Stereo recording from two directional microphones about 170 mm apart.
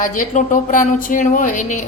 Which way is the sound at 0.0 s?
50° left (ahead or behind).